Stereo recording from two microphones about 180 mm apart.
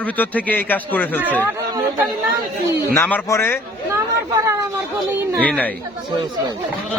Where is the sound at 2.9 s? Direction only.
10° left (ahead or behind).